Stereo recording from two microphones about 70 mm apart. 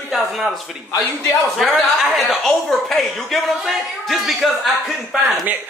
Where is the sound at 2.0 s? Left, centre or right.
Centre.